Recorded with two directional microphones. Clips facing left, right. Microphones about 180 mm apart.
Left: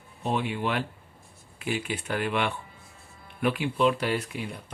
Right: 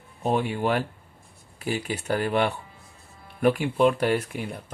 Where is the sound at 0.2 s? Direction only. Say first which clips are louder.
Right 4 dB; 45° right (ahead or behind).